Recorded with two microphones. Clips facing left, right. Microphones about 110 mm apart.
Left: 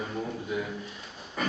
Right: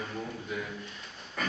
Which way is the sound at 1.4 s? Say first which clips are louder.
Left 4 dB; 5° left (ahead or behind).